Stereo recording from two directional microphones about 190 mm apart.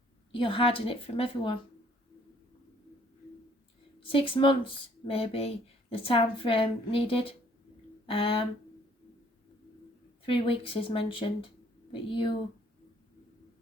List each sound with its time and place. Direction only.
0.3 s speech: 25° left (ahead or behind)
4.0 s speech: 30° left (ahead or behind)
10.2 s speech: 30° left (ahead or behind)